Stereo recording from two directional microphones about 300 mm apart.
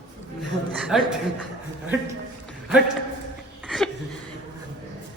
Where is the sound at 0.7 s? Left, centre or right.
Centre.